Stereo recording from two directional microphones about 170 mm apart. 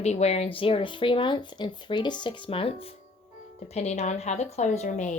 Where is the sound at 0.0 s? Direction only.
40° left (ahead or behind).